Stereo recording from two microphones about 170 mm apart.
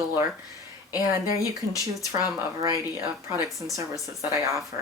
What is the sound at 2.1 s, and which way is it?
Speech, 15° right (ahead or behind).